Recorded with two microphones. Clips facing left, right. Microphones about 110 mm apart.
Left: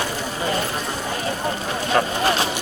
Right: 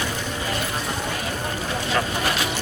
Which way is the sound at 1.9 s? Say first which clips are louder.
Left 5 dB; 35° left (ahead or behind).